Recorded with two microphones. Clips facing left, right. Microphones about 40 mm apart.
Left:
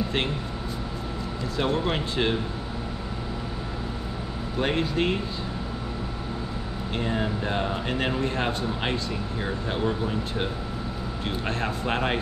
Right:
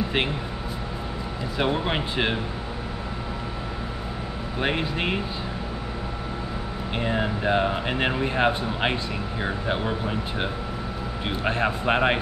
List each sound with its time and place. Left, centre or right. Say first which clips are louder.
1.6 s speech: right 1 dB; right
4.6 s speech: left 1 dB; centre
7.0 s speech: right 2 dB; centre